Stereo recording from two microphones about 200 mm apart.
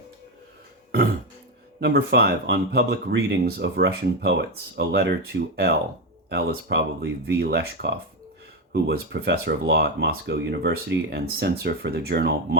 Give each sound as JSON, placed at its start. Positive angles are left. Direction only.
{"t": 1.8, "sound": "speech", "side_deg": -50}